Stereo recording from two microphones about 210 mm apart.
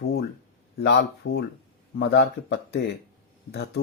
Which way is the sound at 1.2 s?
60° left (ahead or behind).